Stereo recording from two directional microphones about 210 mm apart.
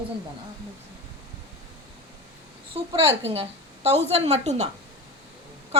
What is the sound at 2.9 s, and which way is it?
A woman's voice, 25° right (ahead or behind).